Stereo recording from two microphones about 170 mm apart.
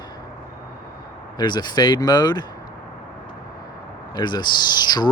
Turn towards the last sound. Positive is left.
turn(degrees=25)  # may be behind; listen again after turning